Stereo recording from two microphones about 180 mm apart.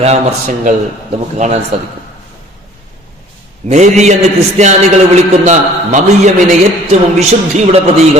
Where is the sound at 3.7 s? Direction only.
40° right (ahead or behind).